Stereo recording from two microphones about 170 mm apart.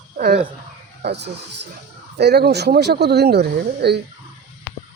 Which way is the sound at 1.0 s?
85° right.